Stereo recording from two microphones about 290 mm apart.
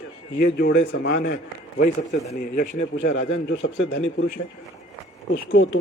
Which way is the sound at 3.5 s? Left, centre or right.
Left.